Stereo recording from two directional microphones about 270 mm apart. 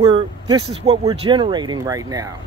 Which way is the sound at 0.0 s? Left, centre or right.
Centre.